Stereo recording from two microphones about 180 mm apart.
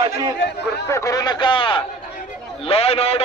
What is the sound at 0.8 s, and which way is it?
A man's voice, 15° left (ahead or behind).